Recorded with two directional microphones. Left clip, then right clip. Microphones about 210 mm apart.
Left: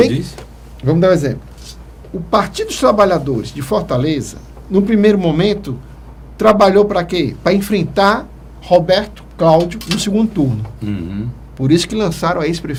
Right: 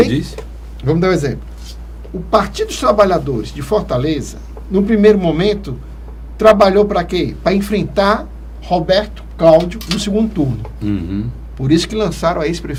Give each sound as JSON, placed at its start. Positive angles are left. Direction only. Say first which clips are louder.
{"t": 0.1, "sound": "a sound", "louder": "right 2 dB", "side_deg": -55}
{"t": 0.8, "sound": "speech", "louder": "left 2 dB", "side_deg": 60}
{"t": 2.3, "sound": "speech", "louder": "right 1 dB", "side_deg": 70}
{"t": 10.8, "sound": "speech", "louder": "right 4 dB", "side_deg": -55}
{"t": 11.5, "sound": "speech", "louder": "even", "side_deg": 65}